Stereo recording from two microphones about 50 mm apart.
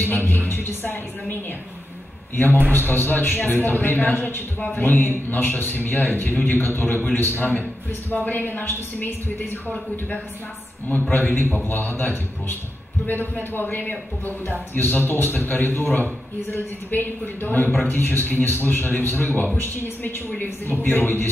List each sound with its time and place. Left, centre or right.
0.0 s music: left
2.3 s a man's voice: left
19.6 s speech: left
20.2 s speech: left
20.8 s speech: left